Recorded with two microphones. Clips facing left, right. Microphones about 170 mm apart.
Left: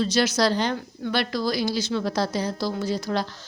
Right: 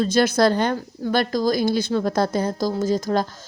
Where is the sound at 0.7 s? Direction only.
40° right (ahead or behind).